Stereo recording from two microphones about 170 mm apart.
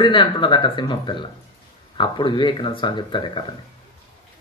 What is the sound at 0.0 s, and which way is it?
Speech, 30° left (ahead or behind).